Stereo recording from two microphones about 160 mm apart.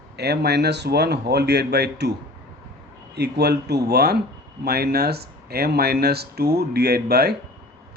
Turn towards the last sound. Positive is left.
turn(degrees=-80)